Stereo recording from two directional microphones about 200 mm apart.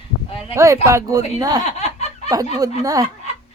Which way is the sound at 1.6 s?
35° left (ahead or behind).